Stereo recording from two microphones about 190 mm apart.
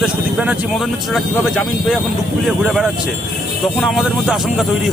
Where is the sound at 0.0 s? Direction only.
5° right (ahead or behind).